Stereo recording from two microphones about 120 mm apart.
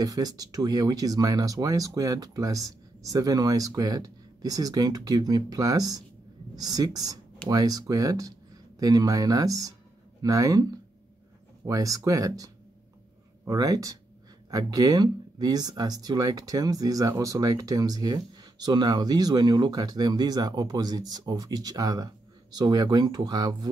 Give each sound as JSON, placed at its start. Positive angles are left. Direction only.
{"t": 0.0, "sound": "speech", "side_deg": -30}
{"t": 13.5, "sound": "speech", "side_deg": -30}